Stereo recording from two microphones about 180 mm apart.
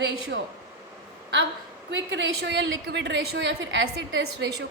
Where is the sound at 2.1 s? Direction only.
85° right.